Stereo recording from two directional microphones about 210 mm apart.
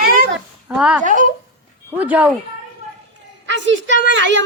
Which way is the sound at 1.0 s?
40° right (ahead or behind).